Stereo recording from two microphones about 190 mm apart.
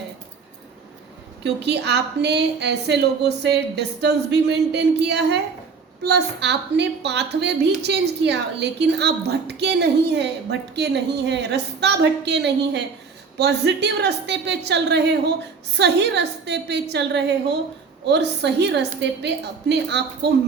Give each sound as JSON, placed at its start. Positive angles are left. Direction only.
{"t": 1.5, "sound": "a woman's voice", "side_deg": -65}